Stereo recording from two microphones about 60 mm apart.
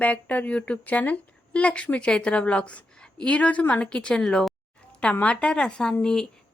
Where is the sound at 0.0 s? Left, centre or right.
Left.